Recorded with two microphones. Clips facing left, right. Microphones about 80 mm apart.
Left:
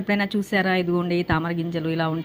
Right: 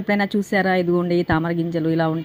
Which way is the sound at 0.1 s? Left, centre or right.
Right.